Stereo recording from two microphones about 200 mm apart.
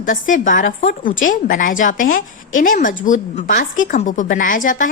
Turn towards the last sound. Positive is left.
turn(degrees=40)  # may be behind; listen again after turning